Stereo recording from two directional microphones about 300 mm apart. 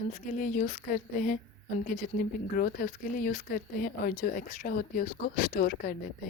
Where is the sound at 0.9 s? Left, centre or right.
Left.